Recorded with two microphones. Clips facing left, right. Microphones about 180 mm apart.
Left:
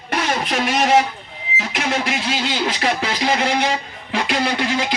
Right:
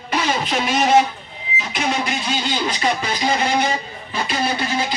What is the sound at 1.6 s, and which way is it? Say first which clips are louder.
Speech: even; 90° left.